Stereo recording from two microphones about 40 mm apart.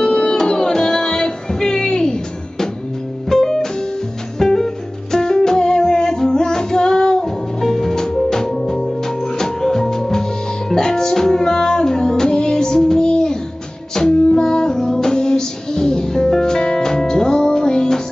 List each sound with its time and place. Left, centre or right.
0.0 s music: left